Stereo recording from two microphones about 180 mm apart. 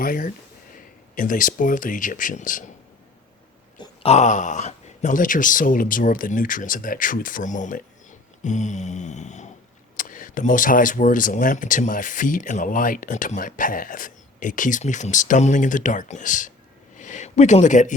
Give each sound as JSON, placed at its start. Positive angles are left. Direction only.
{"t": 0.0, "sound": "speech", "side_deg": 50}
{"t": 3.8, "sound": "speech", "side_deg": 35}
{"t": 8.4, "sound": "a sound", "side_deg": 40}
{"t": 10.0, "sound": "speech", "side_deg": 50}